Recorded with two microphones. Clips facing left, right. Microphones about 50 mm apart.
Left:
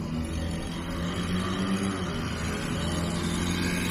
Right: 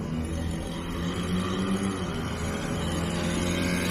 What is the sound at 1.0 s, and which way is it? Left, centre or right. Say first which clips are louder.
Vehicle: right 1 dB; left.